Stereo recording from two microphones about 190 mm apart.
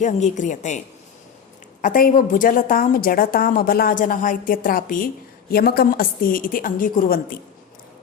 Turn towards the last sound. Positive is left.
turn(degrees=50)  # may be behind; listen again after turning